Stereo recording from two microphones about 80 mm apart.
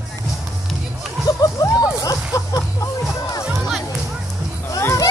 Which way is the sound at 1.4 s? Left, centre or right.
Left.